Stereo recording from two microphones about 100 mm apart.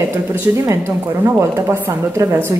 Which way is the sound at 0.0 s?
25° right (ahead or behind).